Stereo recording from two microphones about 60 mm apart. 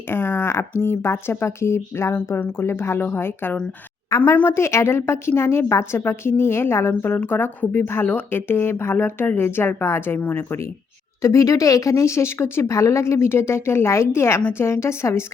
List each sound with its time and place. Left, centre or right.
0.1 s speech: left
2.1 s speech: left
4.1 s speech: left
11.2 s speech: left